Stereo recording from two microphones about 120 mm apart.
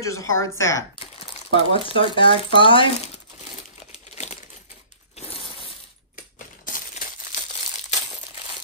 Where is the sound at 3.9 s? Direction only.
65° left (ahead or behind).